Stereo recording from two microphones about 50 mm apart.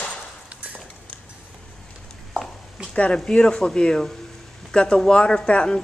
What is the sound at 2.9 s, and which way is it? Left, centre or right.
A woman's voice, left.